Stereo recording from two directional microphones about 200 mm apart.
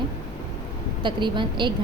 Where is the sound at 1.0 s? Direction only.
25° right (ahead or behind).